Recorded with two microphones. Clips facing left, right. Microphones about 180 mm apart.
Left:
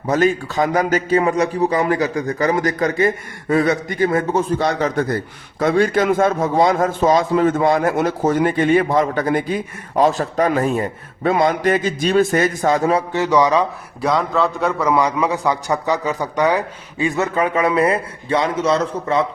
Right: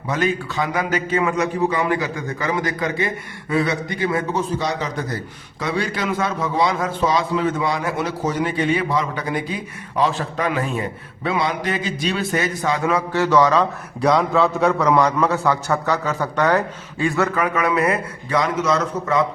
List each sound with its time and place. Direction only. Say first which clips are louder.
0.1 s a man's voice: left 5 dB; 40° left (ahead or behind)
13.1 s a man's voice: right 1 dB; 15° left (ahead or behind)
14.0 s a man's voice: right 1 dB; centre (ahead or behind); by 19.2 s 30° left (ahead or behind)